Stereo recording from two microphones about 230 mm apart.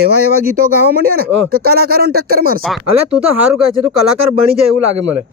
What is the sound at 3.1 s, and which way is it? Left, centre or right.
Speech, centre.